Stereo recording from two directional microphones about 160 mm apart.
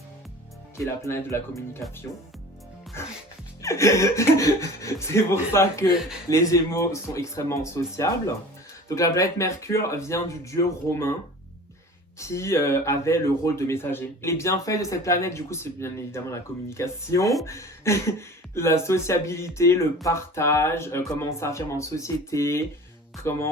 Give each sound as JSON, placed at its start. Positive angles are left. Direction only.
{"t": 0.9, "sound": "speech", "side_deg": 15}
{"t": 3.0, "sound": "speech", "side_deg": 15}
{"t": 12.2, "sound": "speech", "side_deg": 15}